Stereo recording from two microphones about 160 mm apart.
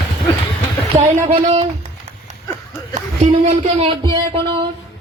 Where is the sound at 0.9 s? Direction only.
50° right (ahead or behind).